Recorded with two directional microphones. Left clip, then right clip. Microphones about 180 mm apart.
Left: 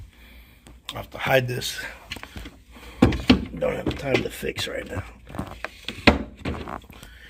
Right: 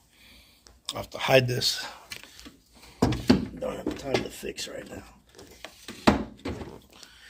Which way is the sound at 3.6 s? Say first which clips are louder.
Left 8 dB; 40° left (ahead or behind).